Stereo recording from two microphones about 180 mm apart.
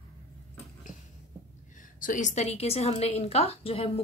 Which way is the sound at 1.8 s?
45° left (ahead or behind).